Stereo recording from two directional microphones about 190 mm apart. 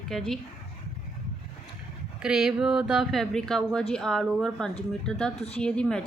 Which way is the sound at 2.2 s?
5° right (ahead or behind).